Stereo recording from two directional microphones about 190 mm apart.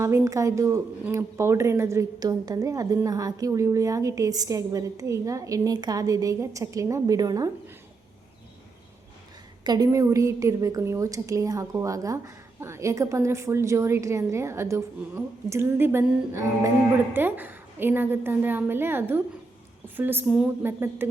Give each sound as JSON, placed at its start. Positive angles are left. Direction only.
{"t": 0.0, "sound": "speech", "side_deg": -15}
{"t": 9.6, "sound": "speech", "side_deg": -20}